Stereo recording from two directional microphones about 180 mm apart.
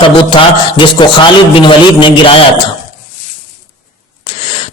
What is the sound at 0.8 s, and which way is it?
A man's voice, 25° left (ahead or behind).